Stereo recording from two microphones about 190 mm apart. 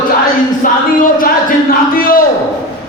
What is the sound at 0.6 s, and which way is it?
Speech, 45° left (ahead or behind).